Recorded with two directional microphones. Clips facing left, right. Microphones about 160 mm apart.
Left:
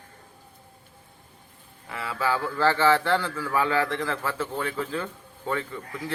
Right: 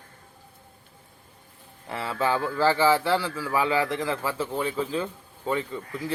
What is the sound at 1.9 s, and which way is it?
Speech, 30° right (ahead or behind).